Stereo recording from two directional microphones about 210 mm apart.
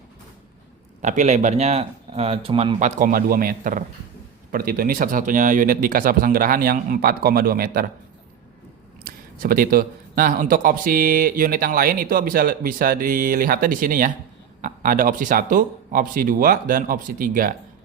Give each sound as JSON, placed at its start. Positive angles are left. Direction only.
{"t": 1.0, "sound": "speech", "side_deg": -35}
{"t": 9.0, "sound": "speech", "side_deg": -45}